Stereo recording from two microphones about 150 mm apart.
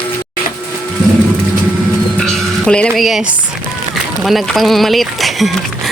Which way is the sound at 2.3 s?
5° left (ahead or behind).